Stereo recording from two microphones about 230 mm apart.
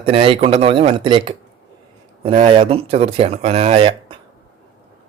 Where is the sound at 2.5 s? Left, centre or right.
Right.